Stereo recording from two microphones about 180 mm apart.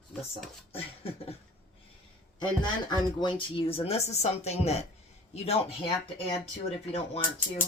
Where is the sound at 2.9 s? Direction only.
25° left (ahead or behind).